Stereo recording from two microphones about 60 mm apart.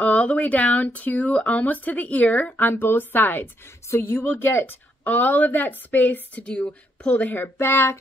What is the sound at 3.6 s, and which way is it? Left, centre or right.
A woman's voice, left.